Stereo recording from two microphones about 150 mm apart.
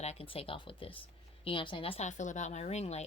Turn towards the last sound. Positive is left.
turn(degrees=45)  # may be behind; listen again after turning